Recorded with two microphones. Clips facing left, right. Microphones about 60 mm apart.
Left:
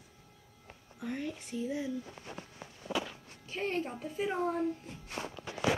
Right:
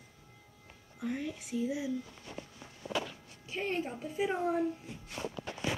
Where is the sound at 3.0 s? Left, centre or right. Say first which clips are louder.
Even; centre.